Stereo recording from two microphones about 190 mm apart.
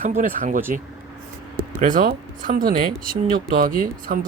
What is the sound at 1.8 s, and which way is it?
Speech, 45° right (ahead or behind).